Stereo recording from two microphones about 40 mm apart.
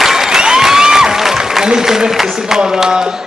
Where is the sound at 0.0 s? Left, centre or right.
Centre.